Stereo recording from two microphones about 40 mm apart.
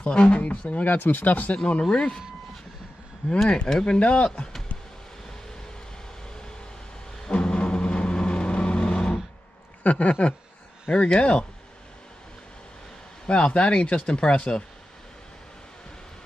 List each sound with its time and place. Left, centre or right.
0.0 s speech: left
0.9 s speech: left
1.9 s a sound: centre
3.4 s speech: left
7.2 s vehicle: left
9.8 s speech: left
13.3 s speech: left